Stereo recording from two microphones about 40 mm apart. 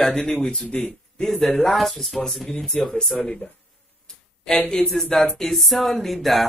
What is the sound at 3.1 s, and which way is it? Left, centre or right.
Speech, left.